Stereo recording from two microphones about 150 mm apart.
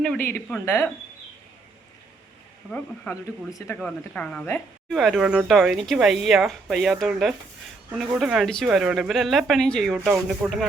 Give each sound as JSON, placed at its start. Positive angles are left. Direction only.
{"t": 0.0, "sound": "a woman's voice", "side_deg": 10}
{"t": 2.7, "sound": "a woman's voice", "side_deg": 10}